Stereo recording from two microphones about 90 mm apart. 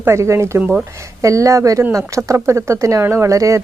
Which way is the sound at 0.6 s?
15° right (ahead or behind).